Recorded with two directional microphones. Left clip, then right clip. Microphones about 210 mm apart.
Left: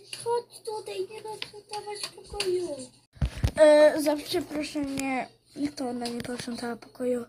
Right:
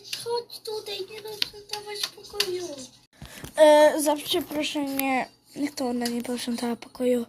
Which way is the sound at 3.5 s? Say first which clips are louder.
Right 2 dB; 10° right (ahead or behind).